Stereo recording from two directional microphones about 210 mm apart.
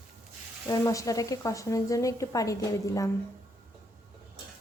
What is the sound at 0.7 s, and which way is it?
A woman's voice, 15° left (ahead or behind).